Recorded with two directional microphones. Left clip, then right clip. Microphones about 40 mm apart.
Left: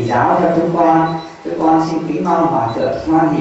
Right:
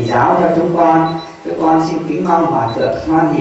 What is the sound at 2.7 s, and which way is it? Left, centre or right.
Speech, centre.